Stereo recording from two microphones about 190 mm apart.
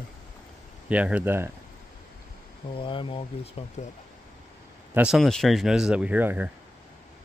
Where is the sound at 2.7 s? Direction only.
25° left (ahead or behind).